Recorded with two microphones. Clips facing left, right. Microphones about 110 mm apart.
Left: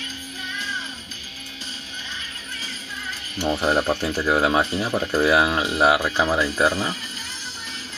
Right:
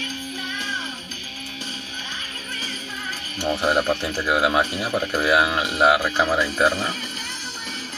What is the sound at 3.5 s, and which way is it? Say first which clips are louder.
Speech: right 1 dB; 15° right (ahead or behind).